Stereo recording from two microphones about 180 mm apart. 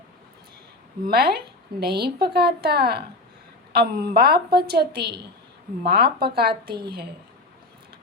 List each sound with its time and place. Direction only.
1.0 s a woman's voice: 60° right (ahead or behind)